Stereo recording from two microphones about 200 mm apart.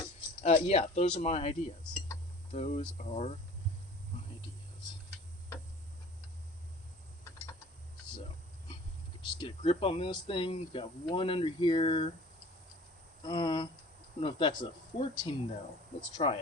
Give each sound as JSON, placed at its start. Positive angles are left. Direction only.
{"t": 0.4, "sound": "speech", "side_deg": 30}
{"t": 1.8, "sound": "a sound", "side_deg": 5}
{"t": 2.5, "sound": "speech", "side_deg": 30}
{"t": 9.4, "sound": "speech", "side_deg": 25}
{"t": 13.2, "sound": "speech", "side_deg": 25}